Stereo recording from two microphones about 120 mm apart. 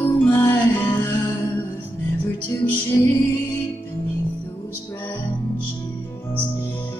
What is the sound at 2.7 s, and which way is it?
Music, 20° left (ahead or behind).